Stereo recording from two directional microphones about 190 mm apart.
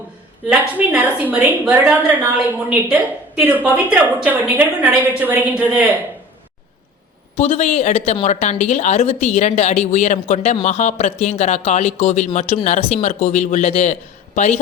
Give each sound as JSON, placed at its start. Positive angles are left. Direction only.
{"t": 0.5, "sound": "a woman's voice", "side_deg": -10}
{"t": 7.3, "sound": "speech", "side_deg": 35}